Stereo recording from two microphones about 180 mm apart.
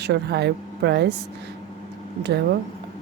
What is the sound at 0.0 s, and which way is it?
A woman's voice, 70° right (ahead or behind).